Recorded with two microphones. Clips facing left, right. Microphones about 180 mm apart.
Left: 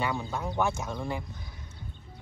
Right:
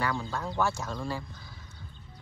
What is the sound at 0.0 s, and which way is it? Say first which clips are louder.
Speech: left 1 dB; 20° left (ahead or behind).